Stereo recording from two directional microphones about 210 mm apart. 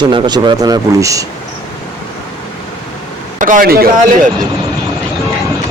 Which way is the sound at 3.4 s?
40° right (ahead or behind).